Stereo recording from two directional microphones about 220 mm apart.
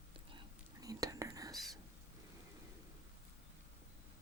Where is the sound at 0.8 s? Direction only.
15° right (ahead or behind).